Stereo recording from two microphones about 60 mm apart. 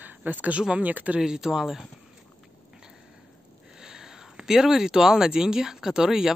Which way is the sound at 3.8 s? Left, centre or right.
Centre.